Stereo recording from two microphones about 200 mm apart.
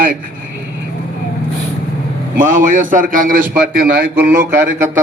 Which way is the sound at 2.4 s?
40° right (ahead or behind).